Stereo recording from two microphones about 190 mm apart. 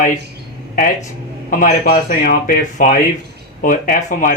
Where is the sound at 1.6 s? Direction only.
50° left (ahead or behind).